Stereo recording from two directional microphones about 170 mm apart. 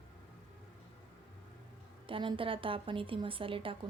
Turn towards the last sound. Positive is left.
turn(degrees=-30)  # may be behind; listen again after turning